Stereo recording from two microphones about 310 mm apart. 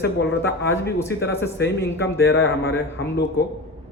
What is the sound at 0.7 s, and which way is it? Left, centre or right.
Speech, centre.